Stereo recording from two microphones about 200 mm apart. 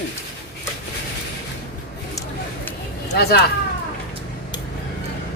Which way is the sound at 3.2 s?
55° left (ahead or behind).